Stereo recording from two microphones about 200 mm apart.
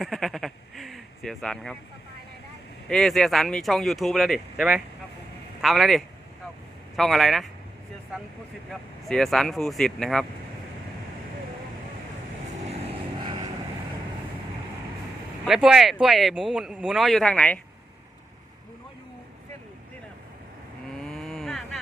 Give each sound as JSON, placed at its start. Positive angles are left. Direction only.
{"t": 0.0, "sound": "bleat", "side_deg": 0}
{"t": 2.9, "sound": "speech", "side_deg": 0}
{"t": 8.7, "sound": "speech", "side_deg": 0}
{"t": 12.8, "sound": "vehicle", "side_deg": -25}
{"t": 15.4, "sound": "speech", "side_deg": 0}
{"t": 20.9, "sound": "vehicle", "side_deg": 0}